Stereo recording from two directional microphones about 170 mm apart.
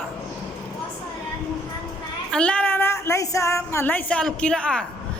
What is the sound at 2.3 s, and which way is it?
A man's voice, 5° left (ahead or behind).